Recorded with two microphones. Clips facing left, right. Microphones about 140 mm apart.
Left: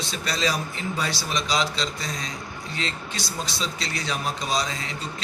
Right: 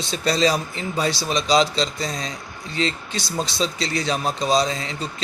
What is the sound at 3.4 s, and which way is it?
A man's voice, 30° right (ahead or behind).